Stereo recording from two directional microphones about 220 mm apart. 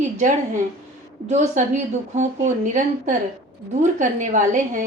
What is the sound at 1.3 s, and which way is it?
A woman's voice, 30° right (ahead or behind).